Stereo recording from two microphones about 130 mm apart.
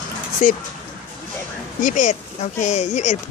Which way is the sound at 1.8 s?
75° left (ahead or behind).